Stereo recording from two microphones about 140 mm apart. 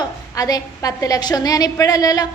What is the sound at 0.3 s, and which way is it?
A woman's voice, 25° left (ahead or behind).